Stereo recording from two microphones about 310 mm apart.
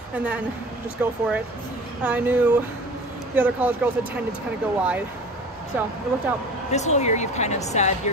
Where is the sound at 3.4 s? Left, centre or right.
Centre.